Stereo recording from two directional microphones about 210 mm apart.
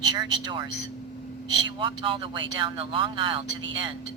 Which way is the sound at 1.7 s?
25° right (ahead or behind).